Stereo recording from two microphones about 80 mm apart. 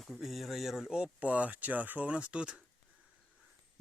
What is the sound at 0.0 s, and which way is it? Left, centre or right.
Speech, centre.